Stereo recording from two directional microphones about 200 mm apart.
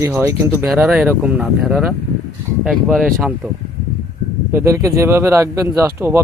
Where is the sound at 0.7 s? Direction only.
Centre (ahead or behind).